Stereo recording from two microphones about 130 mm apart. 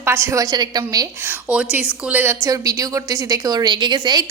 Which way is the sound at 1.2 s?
10° right (ahead or behind).